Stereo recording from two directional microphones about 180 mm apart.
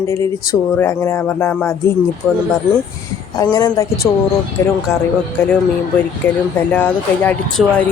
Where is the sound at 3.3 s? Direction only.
20° left (ahead or behind).